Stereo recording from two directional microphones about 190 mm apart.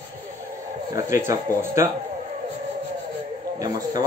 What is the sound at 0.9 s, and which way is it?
Speech, 15° right (ahead or behind).